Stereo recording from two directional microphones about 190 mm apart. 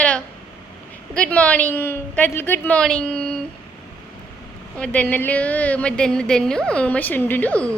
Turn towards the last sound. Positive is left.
turn(degrees=10)  # may be behind; listen again after turning